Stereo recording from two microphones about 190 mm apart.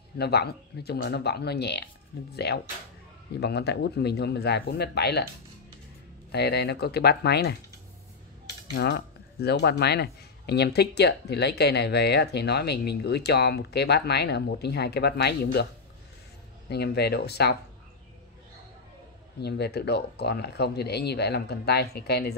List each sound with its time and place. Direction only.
0.2 s speech: 60° left (ahead or behind)
6.3 s speech: 60° left (ahead or behind)
8.7 s speech: 60° left (ahead or behind)
16.6 s speech: 60° left (ahead or behind)
19.4 s speech: 60° left (ahead or behind)